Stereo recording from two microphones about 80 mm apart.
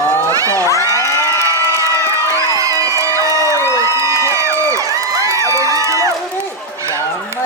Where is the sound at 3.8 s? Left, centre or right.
Right.